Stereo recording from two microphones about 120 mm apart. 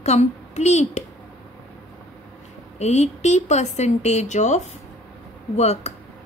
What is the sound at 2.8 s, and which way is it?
A woman's voice, 70° left (ahead or behind).